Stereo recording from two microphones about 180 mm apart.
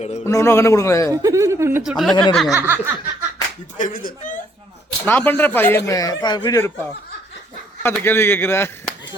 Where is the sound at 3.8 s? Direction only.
50° left (ahead or behind).